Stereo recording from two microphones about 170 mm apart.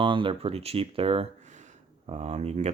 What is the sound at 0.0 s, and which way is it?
Speech, 30° right (ahead or behind).